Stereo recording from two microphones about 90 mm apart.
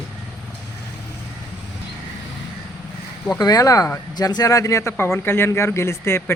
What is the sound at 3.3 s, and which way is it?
Speech, 45° left (ahead or behind).